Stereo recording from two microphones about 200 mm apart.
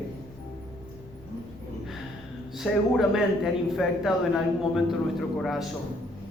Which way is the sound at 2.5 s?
Centre (ahead or behind).